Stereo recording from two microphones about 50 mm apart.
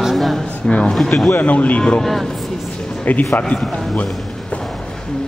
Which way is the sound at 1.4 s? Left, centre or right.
Left.